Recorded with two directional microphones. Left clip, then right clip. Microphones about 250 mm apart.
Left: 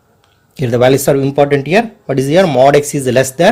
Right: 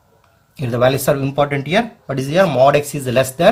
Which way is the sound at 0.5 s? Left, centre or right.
Left.